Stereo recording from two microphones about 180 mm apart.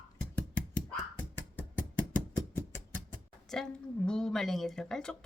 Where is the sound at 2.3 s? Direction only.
15° left (ahead or behind).